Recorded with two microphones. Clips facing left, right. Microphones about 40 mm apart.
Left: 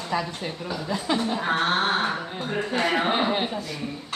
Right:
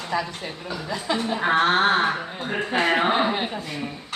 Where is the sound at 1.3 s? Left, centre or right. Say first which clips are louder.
Right 7 dB; right.